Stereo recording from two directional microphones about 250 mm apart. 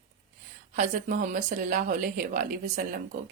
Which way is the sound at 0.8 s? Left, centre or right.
Right.